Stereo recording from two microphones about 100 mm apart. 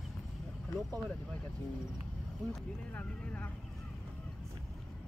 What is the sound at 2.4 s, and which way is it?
Speech, 5° left (ahead or behind).